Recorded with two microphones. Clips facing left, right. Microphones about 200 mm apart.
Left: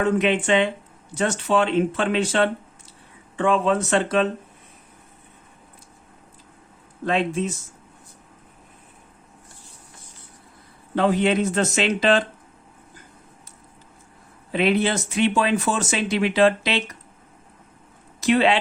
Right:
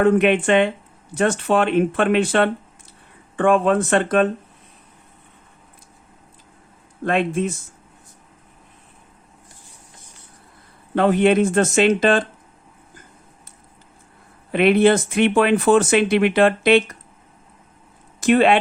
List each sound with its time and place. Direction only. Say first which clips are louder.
0.0 s speech: right 5 dB; 55° right (ahead or behind)
7.0 s speech: right 3 dB; 55° right (ahead or behind)
10.9 s speech: right 4 dB; 55° right (ahead or behind)
14.5 s speech: right 6 dB; 55° right (ahead or behind)
18.2 s speech: right 3 dB; 50° right (ahead or behind)